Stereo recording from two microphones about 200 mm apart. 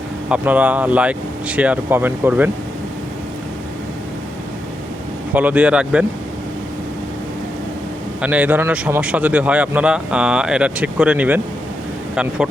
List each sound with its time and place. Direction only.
0.3 s a man's voice: 5° right (ahead or behind)
5.3 s a man's voice: 10° right (ahead or behind)
8.2 s a man's voice: 5° right (ahead or behind)